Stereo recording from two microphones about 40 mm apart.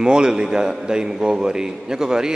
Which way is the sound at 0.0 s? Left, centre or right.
Centre.